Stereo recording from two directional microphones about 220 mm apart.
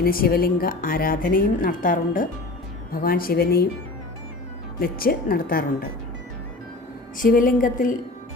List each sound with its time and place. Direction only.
0.0 s a woman's voice: 40° left (ahead or behind)
4.8 s a woman's voice: 40° left (ahead or behind)
7.2 s a woman's voice: 40° left (ahead or behind)